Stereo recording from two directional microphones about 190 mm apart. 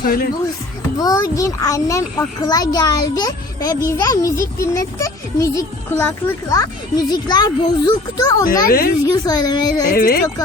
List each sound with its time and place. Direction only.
0.0 s a woman's voice: 50° left (ahead or behind)
0.9 s a child's voice: 20° left (ahead or behind)
8.6 s a woman's voice: 50° left (ahead or behind)
9.0 s a child's voice: 20° left (ahead or behind)
9.9 s a woman's voice: 50° left (ahead or behind)